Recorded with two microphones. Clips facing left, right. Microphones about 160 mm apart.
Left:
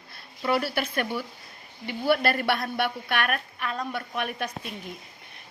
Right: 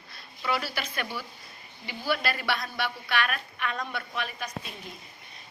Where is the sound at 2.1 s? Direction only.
55° left (ahead or behind).